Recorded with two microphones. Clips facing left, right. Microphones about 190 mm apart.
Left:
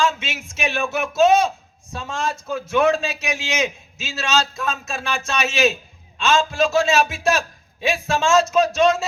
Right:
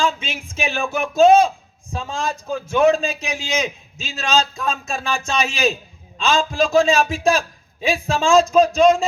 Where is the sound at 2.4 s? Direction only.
35° right (ahead or behind).